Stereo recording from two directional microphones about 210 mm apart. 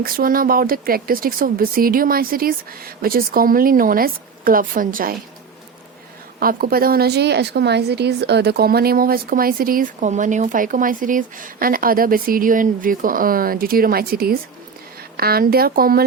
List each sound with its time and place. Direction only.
0.0 s a woman's voice: 45° right (ahead or behind)
6.4 s a woman's voice: 45° right (ahead or behind)